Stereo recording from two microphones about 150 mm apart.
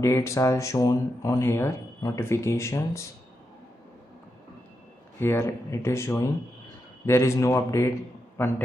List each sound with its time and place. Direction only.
0.0 s speech: 20° left (ahead or behind)
5.2 s speech: 15° left (ahead or behind)